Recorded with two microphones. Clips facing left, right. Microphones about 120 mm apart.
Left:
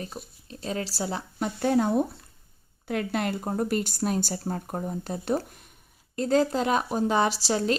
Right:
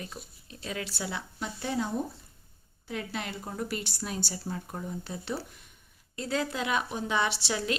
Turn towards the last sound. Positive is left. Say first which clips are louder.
# left 6 dB
turn(degrees=40)  # may be behind; listen again after turning